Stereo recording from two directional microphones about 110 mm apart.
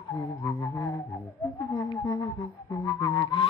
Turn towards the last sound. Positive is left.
turn(degrees=30)  # may be behind; listen again after turning